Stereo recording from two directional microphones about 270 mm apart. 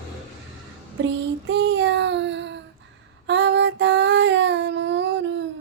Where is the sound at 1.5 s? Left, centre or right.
Right.